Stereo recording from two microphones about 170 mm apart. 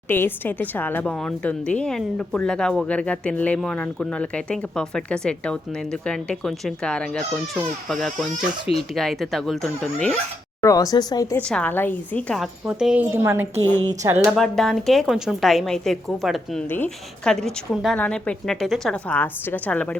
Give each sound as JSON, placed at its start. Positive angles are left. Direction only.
{"t": 0.1, "sound": "speech", "side_deg": 10}
{"t": 10.6, "sound": "speech", "side_deg": 20}
{"t": 11.3, "sound": "a woman's voice", "side_deg": 10}
{"t": 14.3, "sound": "speech", "side_deg": 0}
{"t": 16.6, "sound": "a woman's voice", "side_deg": 10}